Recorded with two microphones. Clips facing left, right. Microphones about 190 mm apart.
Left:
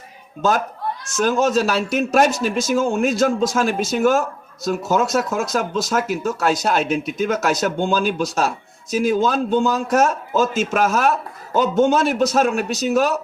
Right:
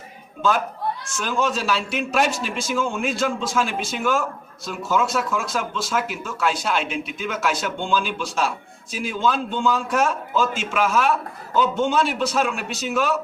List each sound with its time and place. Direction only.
0.4 s a man's voice: 40° left (ahead or behind)